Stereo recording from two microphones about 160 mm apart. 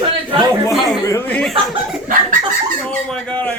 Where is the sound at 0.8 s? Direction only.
15° left (ahead or behind).